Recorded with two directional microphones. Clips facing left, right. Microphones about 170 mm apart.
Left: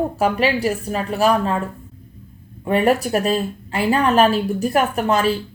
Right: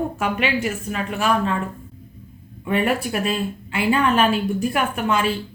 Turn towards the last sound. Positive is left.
turn(degrees=40)  # may be behind; listen again after turning